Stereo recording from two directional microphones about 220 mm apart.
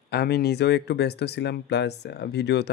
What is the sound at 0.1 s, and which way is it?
Speech, 45° left (ahead or behind).